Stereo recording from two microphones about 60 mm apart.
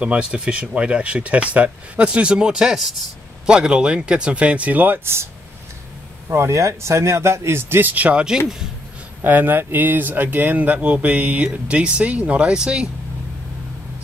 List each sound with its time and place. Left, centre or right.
0.0 s speech: centre; by 7.8 s right
7.8 s speech: right
9.2 s speech: right; by 12.8 s centre